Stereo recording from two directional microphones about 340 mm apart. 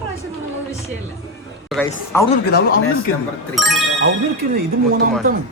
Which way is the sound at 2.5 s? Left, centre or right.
Left.